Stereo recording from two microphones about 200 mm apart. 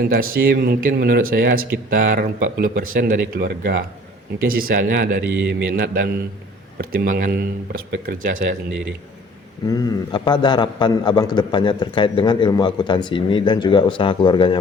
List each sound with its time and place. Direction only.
0.0 s a man's voice: 45° right (ahead or behind)
9.6 s a man's voice: 20° left (ahead or behind)